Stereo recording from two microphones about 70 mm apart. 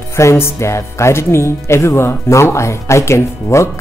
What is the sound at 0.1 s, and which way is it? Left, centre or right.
Speech, left.